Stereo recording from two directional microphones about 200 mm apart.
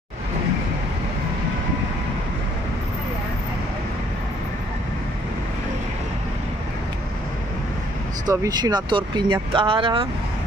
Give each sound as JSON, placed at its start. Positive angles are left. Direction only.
{"t": 8.3, "sound": "speech", "side_deg": -20}